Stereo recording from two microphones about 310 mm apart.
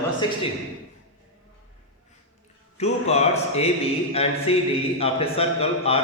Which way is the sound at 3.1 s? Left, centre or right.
Centre.